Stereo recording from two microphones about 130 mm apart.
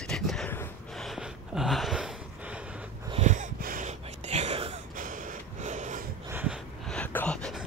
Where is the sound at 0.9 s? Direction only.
Centre (ahead or behind).